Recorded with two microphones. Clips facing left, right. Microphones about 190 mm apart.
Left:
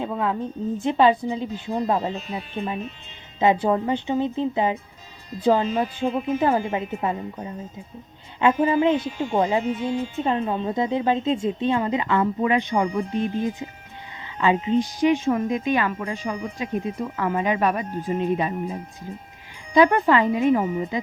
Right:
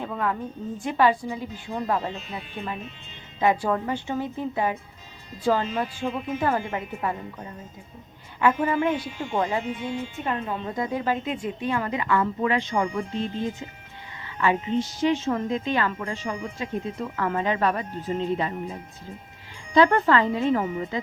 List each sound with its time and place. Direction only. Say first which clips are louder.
0.0 s a woman's voice: left 3 dB; 20° left (ahead or behind)
3.4 s a woman's voice: left 3 dB; 20° left (ahead or behind)
6.1 s speech: left 5 dB; 40° left (ahead or behind)
6.4 s a woman's voice: left 2 dB; 20° left (ahead or behind)
8.6 s a woman's voice: left 5 dB; 20° left (ahead or behind)
9.6 s speech: left 5 dB; 40° left (ahead or behind)
10.2 s a woman's voice: left 5 dB; 25° left (ahead or behind)